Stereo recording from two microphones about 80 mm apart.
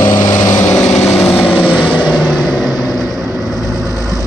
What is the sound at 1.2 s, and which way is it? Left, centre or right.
Vehicle, left.